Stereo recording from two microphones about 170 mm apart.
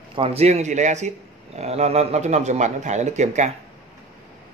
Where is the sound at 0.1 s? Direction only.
35° right (ahead or behind).